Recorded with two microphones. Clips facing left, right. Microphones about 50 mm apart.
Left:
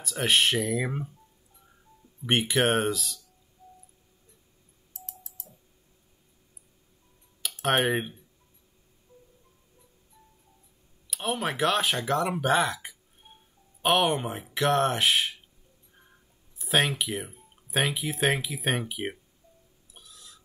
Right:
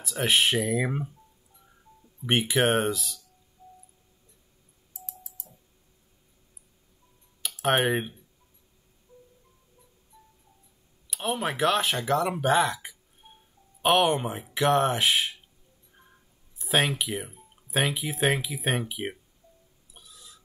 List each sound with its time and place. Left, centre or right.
0.0 s speech: centre
2.2 s speech: centre
4.9 s tick: left
7.4 s speech: centre
11.1 s speech: centre
13.2 s music: centre
13.8 s speech: centre
15.9 s a sound: centre
16.5 s speech: centre
19.9 s burping: centre